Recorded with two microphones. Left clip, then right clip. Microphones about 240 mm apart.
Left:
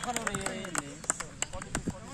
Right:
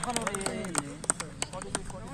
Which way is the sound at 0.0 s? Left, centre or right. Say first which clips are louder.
Right 1 dB; right.